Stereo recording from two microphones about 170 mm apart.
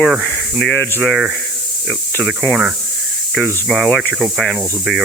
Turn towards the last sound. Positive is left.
turn(degrees=0)  # may be behind; listen again after turning